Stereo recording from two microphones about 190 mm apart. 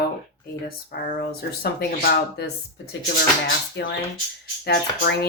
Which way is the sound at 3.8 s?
65° left (ahead or behind).